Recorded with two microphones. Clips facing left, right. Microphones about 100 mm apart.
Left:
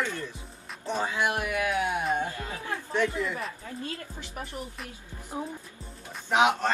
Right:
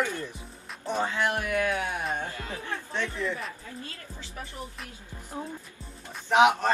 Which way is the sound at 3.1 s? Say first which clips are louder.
Even; 30° right (ahead or behind).